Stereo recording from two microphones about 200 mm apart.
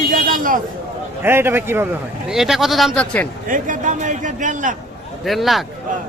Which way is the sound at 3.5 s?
40° right (ahead or behind).